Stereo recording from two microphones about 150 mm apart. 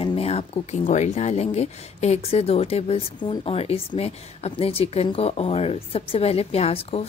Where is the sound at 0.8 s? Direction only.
50° left (ahead or behind).